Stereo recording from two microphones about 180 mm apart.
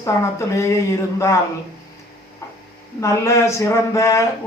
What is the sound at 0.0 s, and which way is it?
Speech, 15° left (ahead or behind).